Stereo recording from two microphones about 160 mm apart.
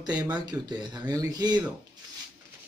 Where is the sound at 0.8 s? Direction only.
25° right (ahead or behind).